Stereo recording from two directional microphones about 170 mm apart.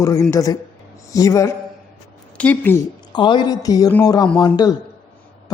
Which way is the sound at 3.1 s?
25° left (ahead or behind).